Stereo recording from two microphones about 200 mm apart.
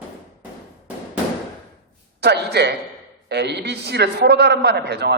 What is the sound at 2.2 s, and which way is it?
A man's voice, 55° right (ahead or behind).